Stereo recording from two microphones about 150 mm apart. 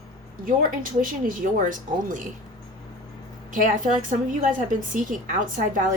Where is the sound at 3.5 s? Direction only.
60° right (ahead or behind).